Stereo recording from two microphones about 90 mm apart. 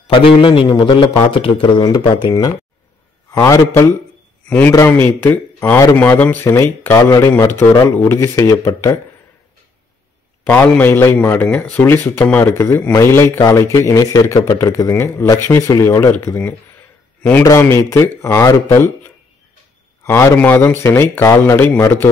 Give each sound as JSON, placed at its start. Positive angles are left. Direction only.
{"t": 0.1, "sound": "a man's voice", "side_deg": 70}
{"t": 1.3, "sound": "a man's voice", "side_deg": 75}
{"t": 3.4, "sound": "speech", "side_deg": 30}
{"t": 4.5, "sound": "a man's voice", "side_deg": 20}
{"t": 6.4, "sound": "speech", "side_deg": 35}
{"t": 7.4, "sound": "speech", "side_deg": 25}
{"t": 10.4, "sound": "a man's voice", "side_deg": 15}
{"t": 20.0, "sound": "a man's voice", "side_deg": 30}
{"t": 20.3, "sound": "speech", "side_deg": 20}